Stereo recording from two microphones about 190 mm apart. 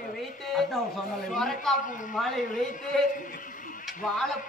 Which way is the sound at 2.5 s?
45° left (ahead or behind).